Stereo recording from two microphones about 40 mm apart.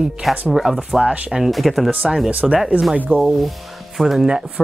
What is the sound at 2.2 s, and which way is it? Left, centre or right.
Speech, right.